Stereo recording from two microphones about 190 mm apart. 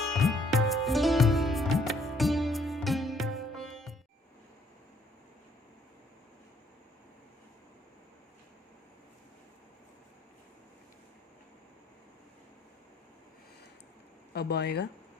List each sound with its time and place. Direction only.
0.1 s music: centre (ahead or behind)
14.3 s speech: 60° left (ahead or behind)